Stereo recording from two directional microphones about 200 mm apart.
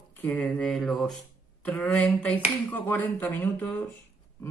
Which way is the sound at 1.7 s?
5° left (ahead or behind).